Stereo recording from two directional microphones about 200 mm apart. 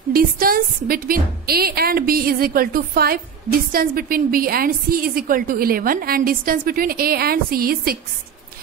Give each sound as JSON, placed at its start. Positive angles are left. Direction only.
{"t": 0.1, "sound": "a woman's voice", "side_deg": -45}